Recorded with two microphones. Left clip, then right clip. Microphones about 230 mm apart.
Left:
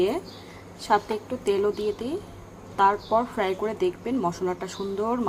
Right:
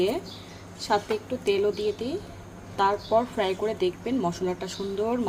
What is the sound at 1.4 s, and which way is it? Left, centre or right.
Speech, centre.